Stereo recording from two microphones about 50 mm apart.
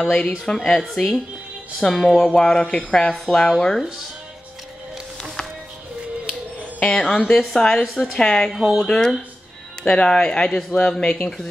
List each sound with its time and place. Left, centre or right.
0.1 s a woman's voice: centre
3.3 s a woman's voice: centre
6.8 s a woman's voice: centre
8.5 s speech: centre
8.8 s a woman's voice: centre